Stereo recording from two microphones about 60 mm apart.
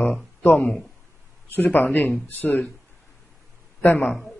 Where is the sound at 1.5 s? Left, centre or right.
Left.